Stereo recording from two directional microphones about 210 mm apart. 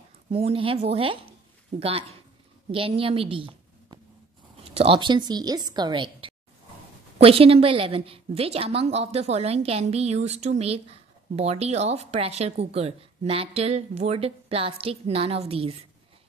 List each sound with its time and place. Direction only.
0.3 s a woman's voice: 25° right (ahead or behind)